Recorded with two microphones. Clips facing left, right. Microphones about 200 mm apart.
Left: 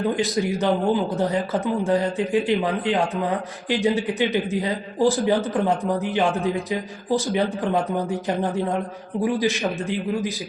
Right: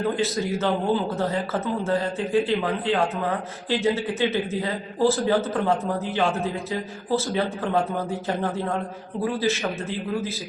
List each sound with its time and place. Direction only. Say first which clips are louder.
0.2 s a man's voice: left 2 dB; 15° left (ahead or behind)